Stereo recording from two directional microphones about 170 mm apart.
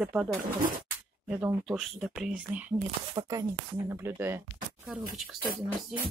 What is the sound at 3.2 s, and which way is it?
Speech, 20° right (ahead or behind).